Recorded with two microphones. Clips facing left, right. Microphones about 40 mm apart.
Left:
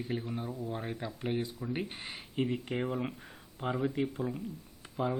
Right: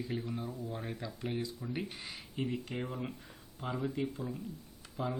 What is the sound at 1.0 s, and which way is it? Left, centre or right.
Speech, left.